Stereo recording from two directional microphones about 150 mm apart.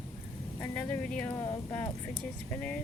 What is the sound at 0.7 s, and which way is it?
Speech, 5° left (ahead or behind).